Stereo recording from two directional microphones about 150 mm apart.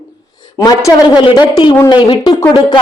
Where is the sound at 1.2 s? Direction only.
35° left (ahead or behind).